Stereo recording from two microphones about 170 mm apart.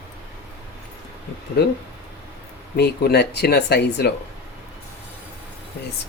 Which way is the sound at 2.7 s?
70° left (ahead or behind).